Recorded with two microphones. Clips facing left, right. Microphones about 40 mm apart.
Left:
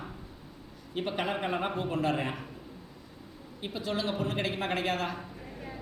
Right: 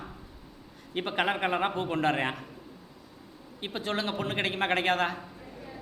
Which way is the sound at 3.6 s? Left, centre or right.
Right.